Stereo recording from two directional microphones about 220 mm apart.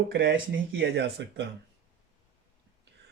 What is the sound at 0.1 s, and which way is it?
Speech, 55° right (ahead or behind).